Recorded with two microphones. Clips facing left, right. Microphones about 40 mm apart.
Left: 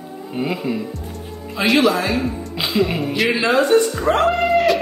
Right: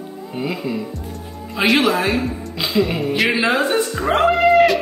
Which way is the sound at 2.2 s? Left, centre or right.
Centre.